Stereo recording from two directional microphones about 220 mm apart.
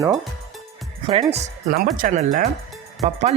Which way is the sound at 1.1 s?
30° right (ahead or behind).